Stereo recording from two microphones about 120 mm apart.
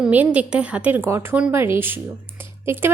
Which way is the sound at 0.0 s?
10° right (ahead or behind).